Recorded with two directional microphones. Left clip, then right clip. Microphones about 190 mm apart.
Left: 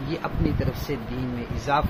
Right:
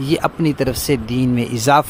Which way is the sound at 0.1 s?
65° right (ahead or behind).